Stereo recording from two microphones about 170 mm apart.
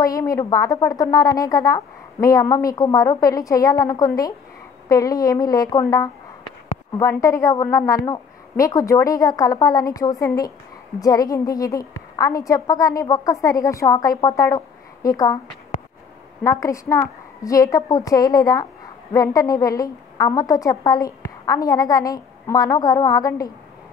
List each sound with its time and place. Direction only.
0.0 s a woman's voice: 20° left (ahead or behind)
16.4 s a woman's voice: 20° left (ahead or behind)